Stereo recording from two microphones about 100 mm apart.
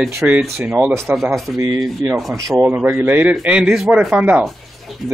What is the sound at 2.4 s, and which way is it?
Speech, 35° right (ahead or behind).